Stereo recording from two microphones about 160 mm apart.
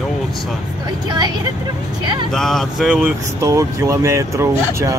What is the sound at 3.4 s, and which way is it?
Speech, 20° right (ahead or behind).